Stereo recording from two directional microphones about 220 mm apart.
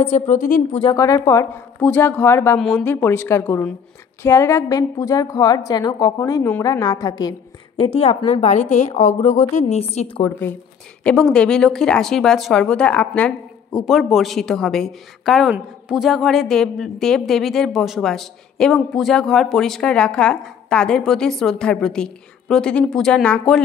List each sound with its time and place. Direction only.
0.0 s a woman's voice: 30° left (ahead or behind)
0.8 s a woman's voice: 15° left (ahead or behind)
11.1 s a woman's voice: 5° left (ahead or behind)